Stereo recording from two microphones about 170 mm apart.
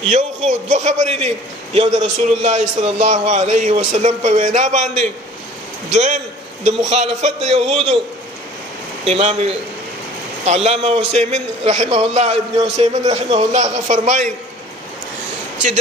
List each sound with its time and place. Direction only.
0.1 s a man's voice: 45° right (ahead or behind)
9.0 s a man's voice: 35° right (ahead or behind)